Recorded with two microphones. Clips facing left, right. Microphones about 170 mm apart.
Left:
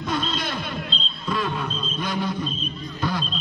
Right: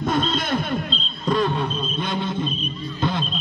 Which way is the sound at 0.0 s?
50° right (ahead or behind).